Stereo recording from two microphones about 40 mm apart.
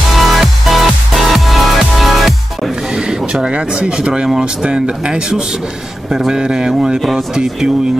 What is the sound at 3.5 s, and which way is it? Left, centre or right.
Speech, centre.